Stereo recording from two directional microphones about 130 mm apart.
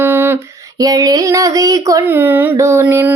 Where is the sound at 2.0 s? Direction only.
15° right (ahead or behind).